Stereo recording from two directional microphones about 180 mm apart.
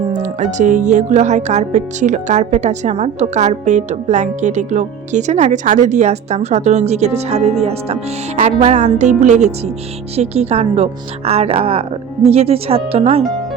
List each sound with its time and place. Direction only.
0.1 s music: 40° right (ahead or behind)